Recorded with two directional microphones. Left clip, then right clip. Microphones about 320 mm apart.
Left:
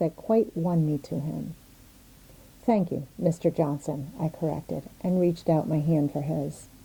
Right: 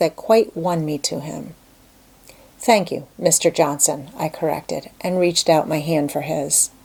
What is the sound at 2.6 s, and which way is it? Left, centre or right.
A woman's voice, centre.